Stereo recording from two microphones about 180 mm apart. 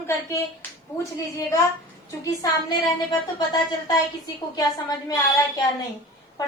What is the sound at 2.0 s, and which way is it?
A woman's voice, 20° left (ahead or behind).